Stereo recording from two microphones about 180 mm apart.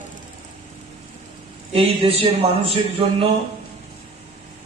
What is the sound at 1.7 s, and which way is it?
Speech, 30° right (ahead or behind).